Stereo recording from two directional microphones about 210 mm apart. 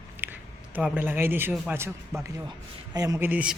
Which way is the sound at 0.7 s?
10° right (ahead or behind).